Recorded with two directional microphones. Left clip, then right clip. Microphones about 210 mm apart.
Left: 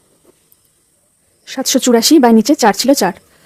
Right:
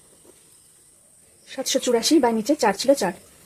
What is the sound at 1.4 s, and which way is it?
Speech, 40° left (ahead or behind).